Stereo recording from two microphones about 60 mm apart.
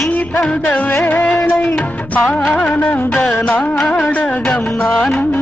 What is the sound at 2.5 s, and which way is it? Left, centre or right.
Music, left.